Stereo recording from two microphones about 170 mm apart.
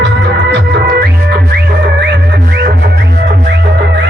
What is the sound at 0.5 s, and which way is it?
Music, 80° right.